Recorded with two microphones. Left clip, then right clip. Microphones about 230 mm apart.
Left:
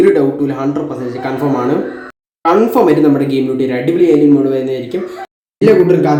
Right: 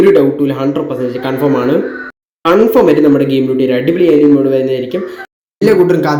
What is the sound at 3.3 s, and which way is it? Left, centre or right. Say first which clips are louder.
Speech: right 3 dB; centre.